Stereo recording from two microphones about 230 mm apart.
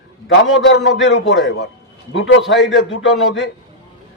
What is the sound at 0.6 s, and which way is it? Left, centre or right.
A man's voice, left.